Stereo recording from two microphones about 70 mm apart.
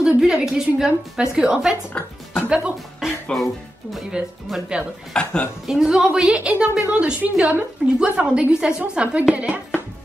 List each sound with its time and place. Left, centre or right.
0.2 s a woman's voice: centre
3.3 s speech: centre
4.1 s a woman's voice: centre
5.1 s speech: centre
5.7 s a woman's voice: centre
6.9 s a woman's voice: centre